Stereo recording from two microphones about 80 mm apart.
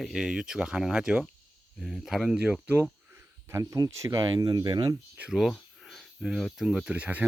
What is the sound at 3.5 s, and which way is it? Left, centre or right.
Speech, right.